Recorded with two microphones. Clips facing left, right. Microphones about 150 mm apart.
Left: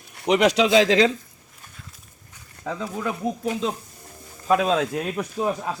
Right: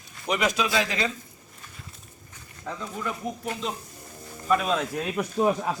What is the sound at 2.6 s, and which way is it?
Speech, 90° left.